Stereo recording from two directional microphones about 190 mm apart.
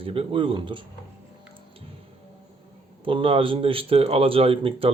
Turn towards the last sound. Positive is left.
turn(degrees=-30)  # may be behind; listen again after turning